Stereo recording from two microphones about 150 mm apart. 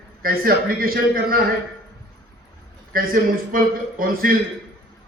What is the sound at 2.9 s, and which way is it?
A man's voice, 70° right (ahead or behind).